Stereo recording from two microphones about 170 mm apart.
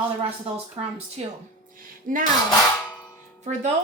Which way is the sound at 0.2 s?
35° right (ahead or behind).